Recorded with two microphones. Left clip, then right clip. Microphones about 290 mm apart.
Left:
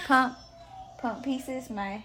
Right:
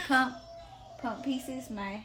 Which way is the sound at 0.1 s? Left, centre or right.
Left.